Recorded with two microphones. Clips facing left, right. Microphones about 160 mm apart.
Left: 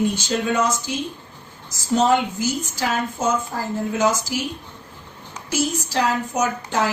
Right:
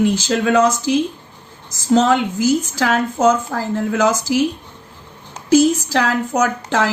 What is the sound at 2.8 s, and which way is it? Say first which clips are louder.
A woman's voice: right 6 dB; 90° right.